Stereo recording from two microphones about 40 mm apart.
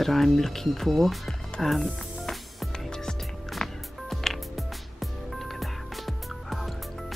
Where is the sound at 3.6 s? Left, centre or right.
Centre.